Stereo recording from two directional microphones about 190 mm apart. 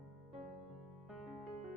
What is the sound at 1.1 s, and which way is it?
Music, centre (ahead or behind).